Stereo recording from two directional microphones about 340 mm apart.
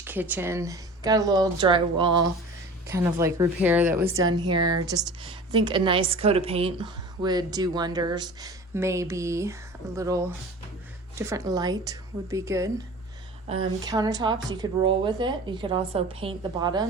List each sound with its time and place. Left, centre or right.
0.0 s a woman's voice: centre
2.0 s speech: right
2.9 s a woman's voice: centre
4.4 s speech: right
4.7 s a woman's voice: centre